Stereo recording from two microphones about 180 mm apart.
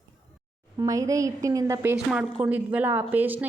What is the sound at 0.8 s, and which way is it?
A woman's voice, 20° right (ahead or behind).